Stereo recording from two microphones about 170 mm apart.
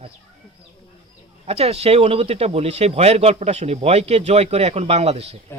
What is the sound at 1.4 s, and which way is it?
Speech, 35° right (ahead or behind).